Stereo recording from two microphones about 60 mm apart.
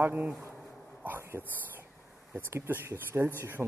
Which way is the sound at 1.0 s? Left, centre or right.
Right.